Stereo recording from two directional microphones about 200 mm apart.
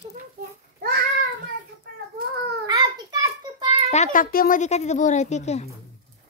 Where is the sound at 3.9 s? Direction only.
40° left (ahead or behind).